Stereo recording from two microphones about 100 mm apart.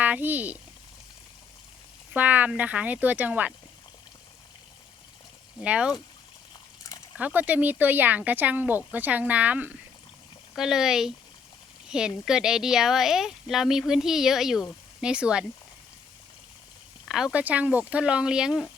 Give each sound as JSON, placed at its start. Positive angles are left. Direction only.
{"t": 0.0, "sound": "speech", "side_deg": -15}
{"t": 2.1, "sound": "speech", "side_deg": -15}
{"t": 5.5, "sound": "speech", "side_deg": -10}
{"t": 7.2, "sound": "speech", "side_deg": -15}
{"t": 10.5, "sound": "speech", "side_deg": -5}
{"t": 17.1, "sound": "speech", "side_deg": -5}